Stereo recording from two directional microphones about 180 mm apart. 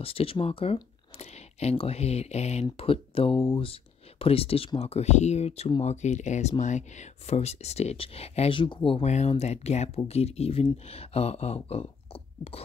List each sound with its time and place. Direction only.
0.0 s speech: 30° left (ahead or behind)